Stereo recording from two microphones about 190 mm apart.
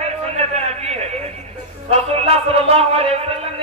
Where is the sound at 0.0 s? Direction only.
35° right (ahead or behind).